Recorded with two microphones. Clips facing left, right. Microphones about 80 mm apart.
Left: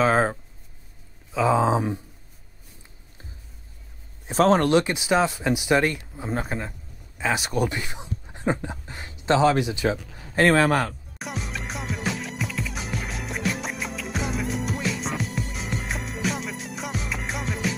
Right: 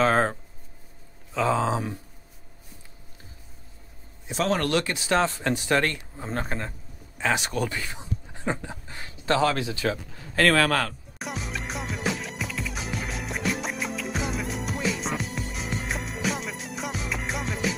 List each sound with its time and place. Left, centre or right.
0.0 s speech: centre
4.3 s a man's voice: left
4.6 s speech: centre
7.5 s speech: centre
11.1 s music: centre